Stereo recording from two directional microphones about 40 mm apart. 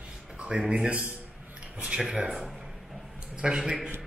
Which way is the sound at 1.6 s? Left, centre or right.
Right.